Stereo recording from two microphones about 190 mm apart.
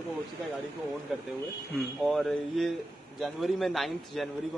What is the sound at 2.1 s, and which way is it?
A man's voice, centre (ahead or behind).